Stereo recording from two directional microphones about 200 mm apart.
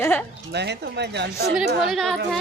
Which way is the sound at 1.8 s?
Centre (ahead or behind).